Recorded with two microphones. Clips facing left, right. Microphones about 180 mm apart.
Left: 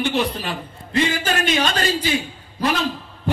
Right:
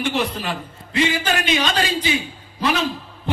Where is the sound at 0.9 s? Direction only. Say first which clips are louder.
Even; 45° left (ahead or behind).